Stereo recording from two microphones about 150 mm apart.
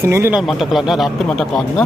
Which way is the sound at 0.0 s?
20° right (ahead or behind).